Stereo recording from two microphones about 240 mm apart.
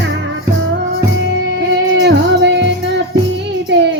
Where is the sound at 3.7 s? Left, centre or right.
Right.